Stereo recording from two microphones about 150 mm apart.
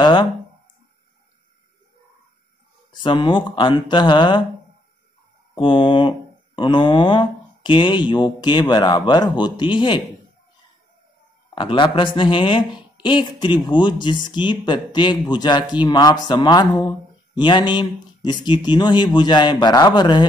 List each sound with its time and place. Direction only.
0.0 s a sound: 30° left (ahead or behind)
2.9 s speech: 30° left (ahead or behind)
5.5 s speech: 35° left (ahead or behind)
11.5 s speech: 35° left (ahead or behind)